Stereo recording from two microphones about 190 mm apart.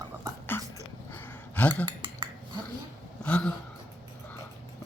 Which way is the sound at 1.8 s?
25° right (ahead or behind).